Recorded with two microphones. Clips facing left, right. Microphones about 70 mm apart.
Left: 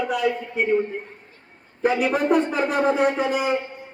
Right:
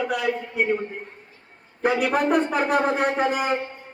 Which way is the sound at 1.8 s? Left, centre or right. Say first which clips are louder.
Left 1 dB; right.